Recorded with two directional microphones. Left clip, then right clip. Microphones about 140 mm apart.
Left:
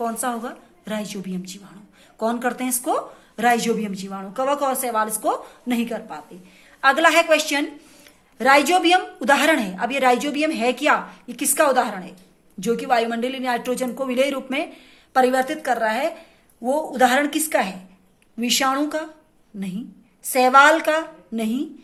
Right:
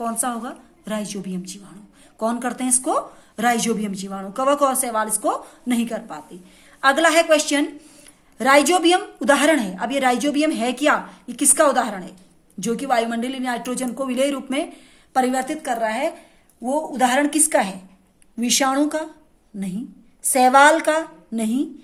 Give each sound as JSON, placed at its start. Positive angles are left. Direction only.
{"t": 0.0, "sound": "speech", "side_deg": -25}